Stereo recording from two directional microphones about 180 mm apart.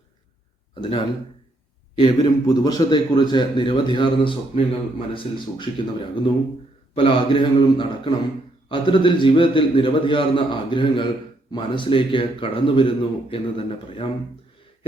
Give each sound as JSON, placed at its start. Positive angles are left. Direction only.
{"t": 0.7, "sound": "a man's voice", "side_deg": 30}
{"t": 6.9, "sound": "a man's voice", "side_deg": 30}